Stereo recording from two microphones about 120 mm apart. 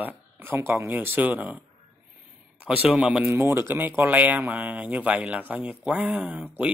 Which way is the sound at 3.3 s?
20° right (ahead or behind).